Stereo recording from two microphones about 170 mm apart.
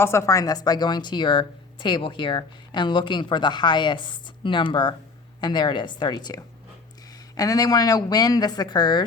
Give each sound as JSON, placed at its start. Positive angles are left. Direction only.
{"t": 0.0, "sound": "speech", "side_deg": 15}